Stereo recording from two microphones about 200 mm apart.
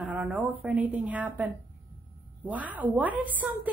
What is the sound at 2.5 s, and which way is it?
Speech, 10° right (ahead or behind).